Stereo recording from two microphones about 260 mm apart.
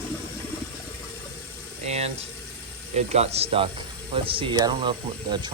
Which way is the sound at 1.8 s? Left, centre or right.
Right.